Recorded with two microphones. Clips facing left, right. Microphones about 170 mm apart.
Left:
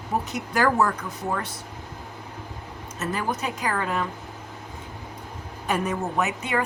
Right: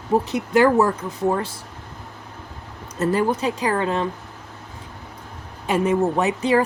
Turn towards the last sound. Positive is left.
turn(degrees=-30)  # may be behind; listen again after turning